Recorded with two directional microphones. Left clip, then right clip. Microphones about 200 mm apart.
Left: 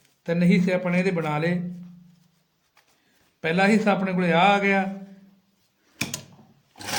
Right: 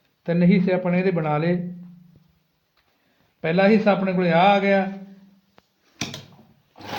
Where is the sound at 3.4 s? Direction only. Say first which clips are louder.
Right 3 dB; 30° right (ahead or behind).